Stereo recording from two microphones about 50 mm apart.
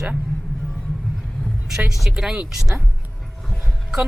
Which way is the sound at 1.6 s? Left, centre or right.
Centre.